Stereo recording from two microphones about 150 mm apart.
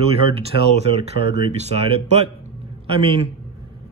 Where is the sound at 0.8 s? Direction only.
45° right (ahead or behind).